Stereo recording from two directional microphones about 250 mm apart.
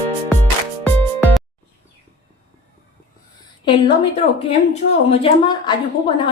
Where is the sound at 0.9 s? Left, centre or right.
Centre.